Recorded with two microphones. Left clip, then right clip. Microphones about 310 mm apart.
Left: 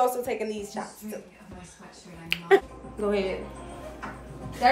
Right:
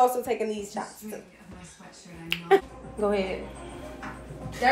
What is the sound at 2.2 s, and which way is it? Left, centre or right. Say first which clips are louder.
Speech: left 1 dB; centre.